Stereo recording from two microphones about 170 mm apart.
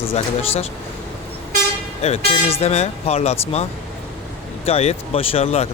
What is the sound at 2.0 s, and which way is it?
Speech, 40° left (ahead or behind).